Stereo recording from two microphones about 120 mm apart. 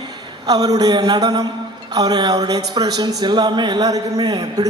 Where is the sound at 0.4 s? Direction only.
30° right (ahead or behind).